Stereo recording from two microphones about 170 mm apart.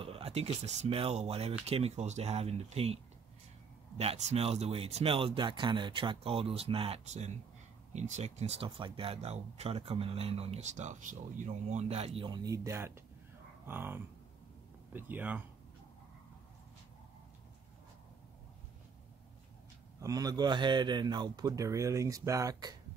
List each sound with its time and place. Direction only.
0.0 s speech: 35° right (ahead or behind)
4.0 s speech: 40° right (ahead or behind)
12.4 s speech: 15° right (ahead or behind)
20.0 s a man's voice: 20° right (ahead or behind)